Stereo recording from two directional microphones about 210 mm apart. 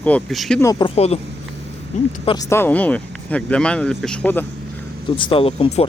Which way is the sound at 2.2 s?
20° left (ahead or behind).